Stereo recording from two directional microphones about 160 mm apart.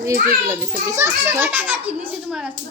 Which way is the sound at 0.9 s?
15° right (ahead or behind).